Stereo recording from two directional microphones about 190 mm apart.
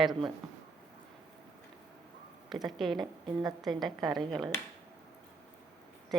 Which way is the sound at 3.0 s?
20° right (ahead or behind).